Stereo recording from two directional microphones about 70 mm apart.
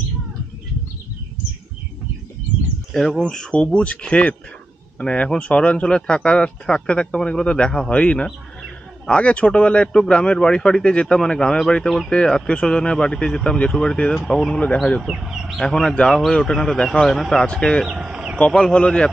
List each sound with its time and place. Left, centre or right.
2.9 s speech: centre
15.0 s speech: centre
15.6 s speech: centre
17.8 s speech: centre
18.7 s speech: centre